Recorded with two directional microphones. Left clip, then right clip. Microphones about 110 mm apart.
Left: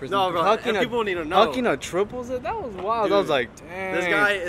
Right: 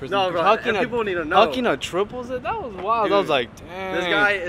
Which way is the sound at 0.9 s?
30° left (ahead or behind).